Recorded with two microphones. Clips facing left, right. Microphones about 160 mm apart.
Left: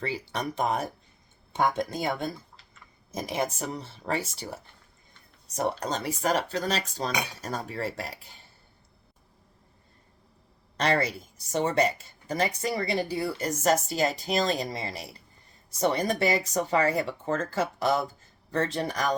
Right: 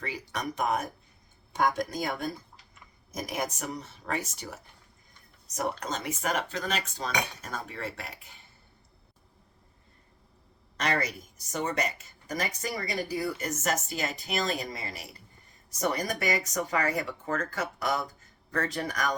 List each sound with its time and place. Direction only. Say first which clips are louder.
0.0 s speech: left 3 dB; 30° left (ahead or behind)
10.8 s speech: left 4 dB; 30° left (ahead or behind)